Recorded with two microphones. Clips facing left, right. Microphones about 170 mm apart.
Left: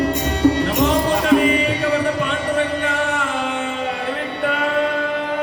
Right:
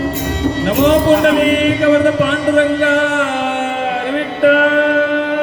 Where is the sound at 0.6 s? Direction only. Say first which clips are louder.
Right 7 dB; 75° right (ahead or behind).